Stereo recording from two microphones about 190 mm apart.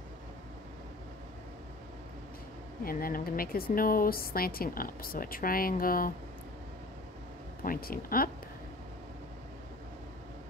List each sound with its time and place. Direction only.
2.8 s speech: 50° left (ahead or behind)
7.6 s speech: 50° left (ahead or behind)